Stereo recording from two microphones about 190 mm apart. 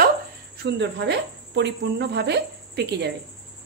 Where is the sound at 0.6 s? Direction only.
65° right (ahead or behind).